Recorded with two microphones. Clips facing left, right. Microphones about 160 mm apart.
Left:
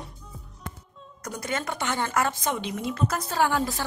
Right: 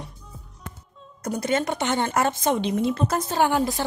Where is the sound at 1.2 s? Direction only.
25° right (ahead or behind).